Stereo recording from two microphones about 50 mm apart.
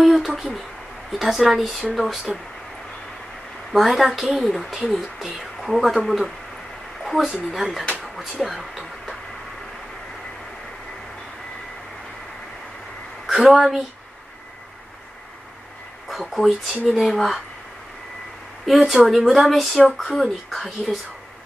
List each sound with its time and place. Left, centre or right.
0.0 s a sound: centre
1.1 s speech: centre
3.7 s speech: centre
7.0 s a sound: centre
7.5 s speech: centre
8.0 s a sound: centre
13.3 s speech: centre
16.1 s speech: centre
18.7 s speech: centre